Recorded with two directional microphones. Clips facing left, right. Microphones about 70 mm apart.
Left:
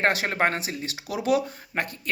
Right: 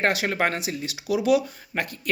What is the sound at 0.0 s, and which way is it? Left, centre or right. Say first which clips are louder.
Speech: even; left.